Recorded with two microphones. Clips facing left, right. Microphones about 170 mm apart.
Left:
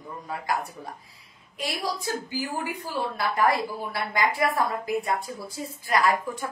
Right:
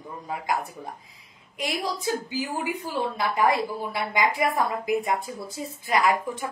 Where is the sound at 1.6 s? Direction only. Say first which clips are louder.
Right 1 dB; 20° right (ahead or behind).